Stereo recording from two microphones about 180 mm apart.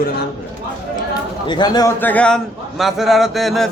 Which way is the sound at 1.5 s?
25° left (ahead or behind).